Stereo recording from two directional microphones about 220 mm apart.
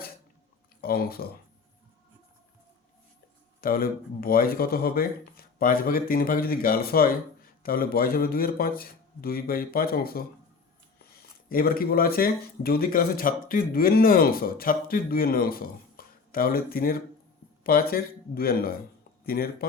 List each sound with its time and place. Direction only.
0.8 s speech: 45° left (ahead or behind)
3.6 s speech: 40° left (ahead or behind)
11.4 s speech: 40° left (ahead or behind)